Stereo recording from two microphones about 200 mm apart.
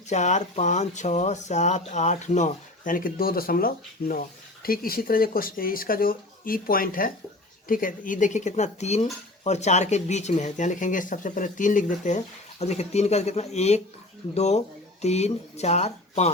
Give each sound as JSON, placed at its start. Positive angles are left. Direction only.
{"t": 0.1, "sound": "speech", "side_deg": 35}